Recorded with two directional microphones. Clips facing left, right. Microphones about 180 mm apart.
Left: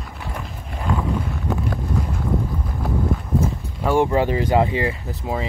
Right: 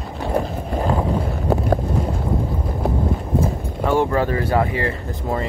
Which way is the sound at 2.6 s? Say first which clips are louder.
Right 2 dB; 25° right (ahead or behind).